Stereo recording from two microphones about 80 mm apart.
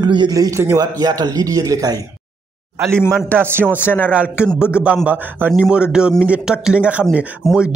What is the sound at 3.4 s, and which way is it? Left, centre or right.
Speech, right.